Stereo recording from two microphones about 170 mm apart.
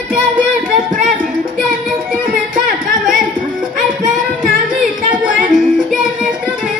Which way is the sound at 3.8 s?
55° right (ahead or behind).